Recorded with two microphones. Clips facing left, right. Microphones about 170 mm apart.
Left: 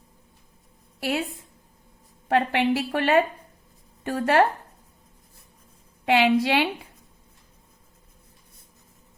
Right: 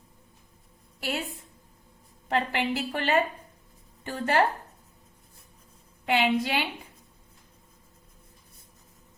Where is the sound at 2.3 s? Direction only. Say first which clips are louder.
Left 6 dB; 60° left (ahead or behind).